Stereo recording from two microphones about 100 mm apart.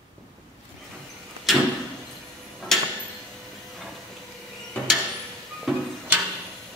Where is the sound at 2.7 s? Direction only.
5° left (ahead or behind).